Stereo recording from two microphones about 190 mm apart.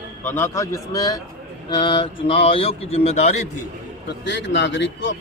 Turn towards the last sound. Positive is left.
turn(degrees=75)  # may be behind; listen again after turning